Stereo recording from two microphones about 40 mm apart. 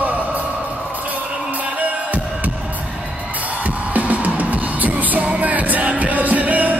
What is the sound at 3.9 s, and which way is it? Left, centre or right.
Music, right.